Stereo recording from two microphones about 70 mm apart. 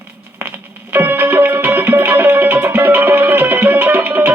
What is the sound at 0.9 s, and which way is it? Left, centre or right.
Music, right.